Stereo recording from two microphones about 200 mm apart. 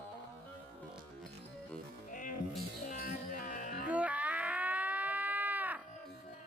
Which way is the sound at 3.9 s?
5° right (ahead or behind).